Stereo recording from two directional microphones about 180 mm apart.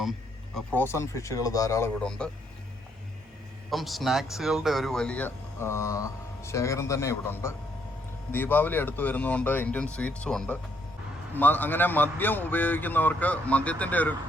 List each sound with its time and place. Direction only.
0.5 s speech: 10° left (ahead or behind)
2.0 s a man's voice: 5° left (ahead or behind)
3.7 s speech: centre (ahead or behind)